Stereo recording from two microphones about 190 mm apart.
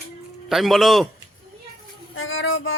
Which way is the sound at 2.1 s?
90° left.